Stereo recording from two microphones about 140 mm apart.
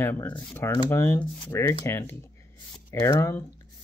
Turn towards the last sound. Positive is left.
turn(degrees=20)  # may be behind; listen again after turning